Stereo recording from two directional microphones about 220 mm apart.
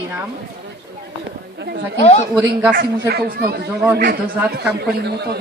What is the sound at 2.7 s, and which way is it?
Speech, 45° right (ahead or behind).